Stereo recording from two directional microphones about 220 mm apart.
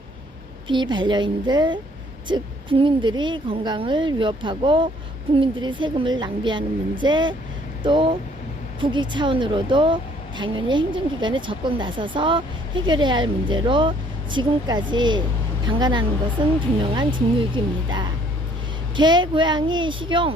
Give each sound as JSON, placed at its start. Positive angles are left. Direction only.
{"t": 0.7, "sound": "a woman's voice", "side_deg": -20}